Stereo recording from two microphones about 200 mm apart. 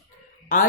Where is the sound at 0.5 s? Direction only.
45° left (ahead or behind).